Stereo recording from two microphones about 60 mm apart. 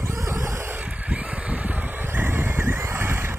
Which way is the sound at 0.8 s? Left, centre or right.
Right.